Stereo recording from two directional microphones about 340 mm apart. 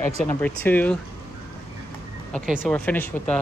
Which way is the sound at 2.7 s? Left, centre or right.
Centre.